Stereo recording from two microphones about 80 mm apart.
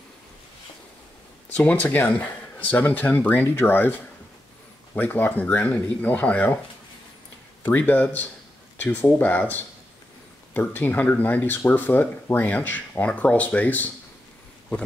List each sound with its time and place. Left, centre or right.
1.5 s speech: centre
4.9 s speech: left
7.6 s speech: left